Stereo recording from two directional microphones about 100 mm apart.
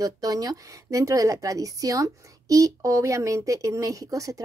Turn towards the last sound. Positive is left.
turn(degrees=-35)  # may be behind; listen again after turning